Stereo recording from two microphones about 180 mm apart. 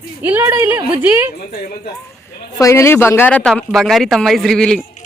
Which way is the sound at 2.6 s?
15° left (ahead or behind).